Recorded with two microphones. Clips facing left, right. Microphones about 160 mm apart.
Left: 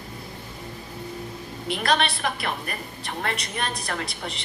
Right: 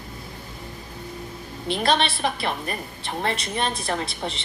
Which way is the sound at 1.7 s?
25° right (ahead or behind).